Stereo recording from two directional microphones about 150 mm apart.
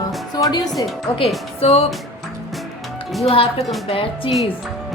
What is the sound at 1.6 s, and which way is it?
Music, 40° left (ahead or behind).